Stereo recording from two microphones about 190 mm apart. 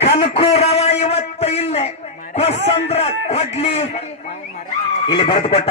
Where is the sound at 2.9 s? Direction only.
35° left (ahead or behind).